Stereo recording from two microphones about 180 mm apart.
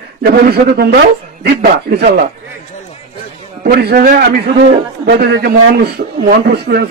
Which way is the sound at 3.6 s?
60° right (ahead or behind).